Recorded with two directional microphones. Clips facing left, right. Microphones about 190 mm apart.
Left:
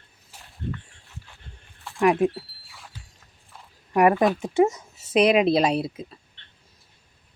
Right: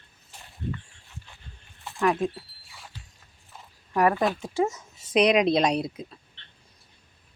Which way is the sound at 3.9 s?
15° left (ahead or behind).